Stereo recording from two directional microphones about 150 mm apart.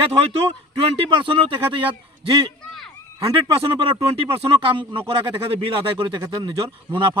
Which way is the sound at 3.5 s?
30° right (ahead or behind).